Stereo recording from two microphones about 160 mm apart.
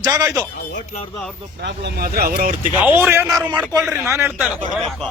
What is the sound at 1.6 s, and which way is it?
Speech, 85° right.